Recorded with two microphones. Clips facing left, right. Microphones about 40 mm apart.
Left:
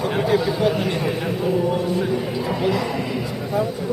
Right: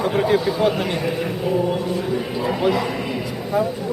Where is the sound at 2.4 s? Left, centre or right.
Centre.